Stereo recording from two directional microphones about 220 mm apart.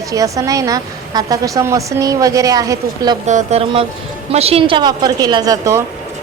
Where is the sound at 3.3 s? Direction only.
30° right (ahead or behind).